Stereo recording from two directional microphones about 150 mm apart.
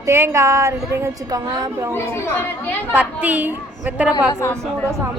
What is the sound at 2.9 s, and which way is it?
A woman's voice, 10° right (ahead or behind).